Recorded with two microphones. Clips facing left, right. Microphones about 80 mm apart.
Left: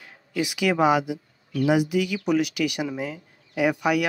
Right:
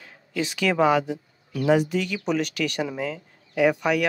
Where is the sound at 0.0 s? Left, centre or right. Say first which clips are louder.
Left 1 dB; centre.